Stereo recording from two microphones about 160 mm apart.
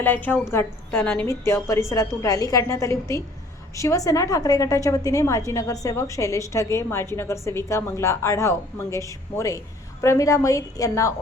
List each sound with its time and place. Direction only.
0.0 s a woman's voice: 10° left (ahead or behind)